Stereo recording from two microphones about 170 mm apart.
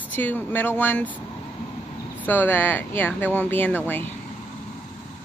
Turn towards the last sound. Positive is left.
turn(degrees=10)  # may be behind; listen again after turning